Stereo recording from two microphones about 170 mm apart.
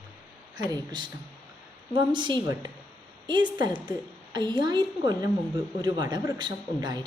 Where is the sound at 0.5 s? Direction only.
25° right (ahead or behind).